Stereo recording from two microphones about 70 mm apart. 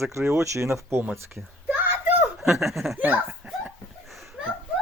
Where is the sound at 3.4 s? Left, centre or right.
Right.